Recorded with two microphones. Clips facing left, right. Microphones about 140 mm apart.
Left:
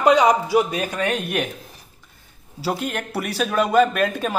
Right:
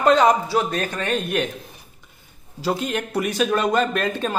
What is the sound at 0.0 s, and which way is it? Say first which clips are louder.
Speech: even; 10° left (ahead or behind).